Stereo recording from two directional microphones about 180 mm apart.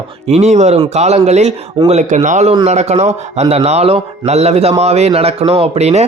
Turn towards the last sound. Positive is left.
turn(degrees=-35)  # may be behind; listen again after turning